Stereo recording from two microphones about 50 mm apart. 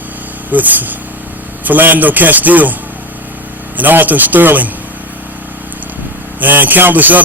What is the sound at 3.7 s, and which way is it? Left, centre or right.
Speech, right.